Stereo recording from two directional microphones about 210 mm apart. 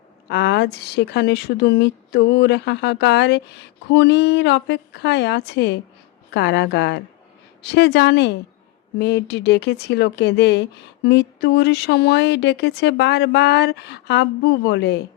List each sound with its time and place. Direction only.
0.3 s speech: 55° left (ahead or behind)